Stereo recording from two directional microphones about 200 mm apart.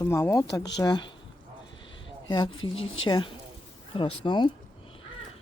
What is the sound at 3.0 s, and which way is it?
Speech, 25° left (ahead or behind).